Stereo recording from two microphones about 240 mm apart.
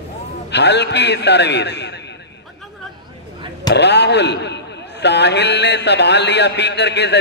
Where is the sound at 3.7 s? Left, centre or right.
Left.